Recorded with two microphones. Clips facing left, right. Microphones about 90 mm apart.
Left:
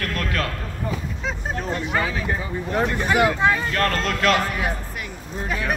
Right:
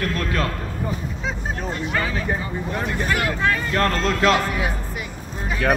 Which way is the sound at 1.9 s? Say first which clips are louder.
Even; centre (ahead or behind).